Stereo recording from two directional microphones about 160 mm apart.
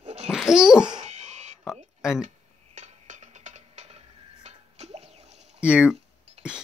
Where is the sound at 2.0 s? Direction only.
5° right (ahead or behind).